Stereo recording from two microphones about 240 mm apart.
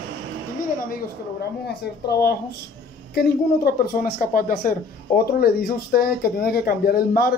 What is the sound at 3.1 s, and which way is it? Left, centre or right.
Speech, left.